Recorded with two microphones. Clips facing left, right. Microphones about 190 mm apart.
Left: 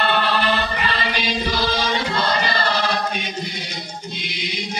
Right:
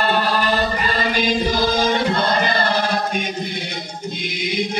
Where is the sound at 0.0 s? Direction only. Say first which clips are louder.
Right 1 dB; 40° right (ahead or behind).